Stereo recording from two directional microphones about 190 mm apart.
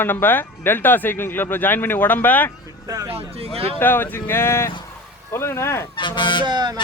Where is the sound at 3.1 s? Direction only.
30° right (ahead or behind).